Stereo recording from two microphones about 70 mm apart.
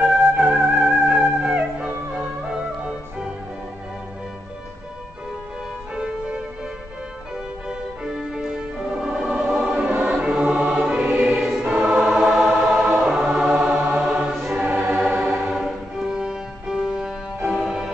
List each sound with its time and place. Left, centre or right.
0.0 s music: centre
7.6 s music: centre
11.3 s choir: centre
12.8 s choir: centre
14.5 s choir: centre
15.0 s music: centre